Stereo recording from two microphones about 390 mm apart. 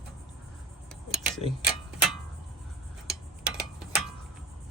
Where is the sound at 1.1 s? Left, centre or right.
Centre.